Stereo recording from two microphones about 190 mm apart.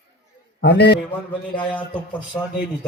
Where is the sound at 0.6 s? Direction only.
60° left (ahead or behind).